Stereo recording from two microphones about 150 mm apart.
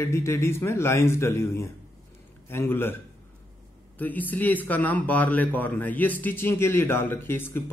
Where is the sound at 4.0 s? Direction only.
10° left (ahead or behind).